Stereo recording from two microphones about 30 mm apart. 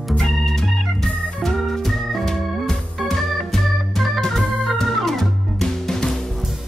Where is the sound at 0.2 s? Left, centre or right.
Centre.